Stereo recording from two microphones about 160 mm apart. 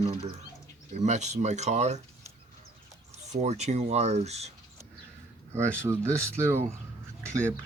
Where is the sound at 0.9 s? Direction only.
45° right (ahead or behind).